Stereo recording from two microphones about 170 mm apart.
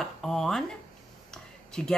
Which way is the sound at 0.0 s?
Centre (ahead or behind).